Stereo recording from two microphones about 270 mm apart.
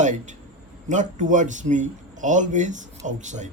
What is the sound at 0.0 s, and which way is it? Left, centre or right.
A man's voice, right.